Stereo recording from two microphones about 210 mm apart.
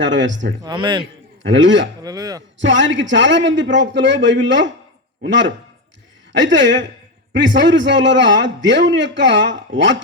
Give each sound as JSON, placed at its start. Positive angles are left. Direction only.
{"t": 0.0, "sound": "a man's voice", "side_deg": -60}
{"t": 0.6, "sound": "a man's voice", "side_deg": -20}
{"t": 1.4, "sound": "a man's voice", "side_deg": -60}
{"t": 2.0, "sound": "a sound", "side_deg": -15}
{"t": 2.6, "sound": "a man's voice", "side_deg": -60}